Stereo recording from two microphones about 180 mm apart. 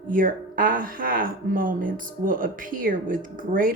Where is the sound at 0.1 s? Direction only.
50° right (ahead or behind).